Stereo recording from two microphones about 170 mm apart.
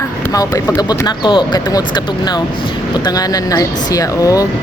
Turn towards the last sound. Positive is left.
turn(degrees=20)  # may be behind; listen again after turning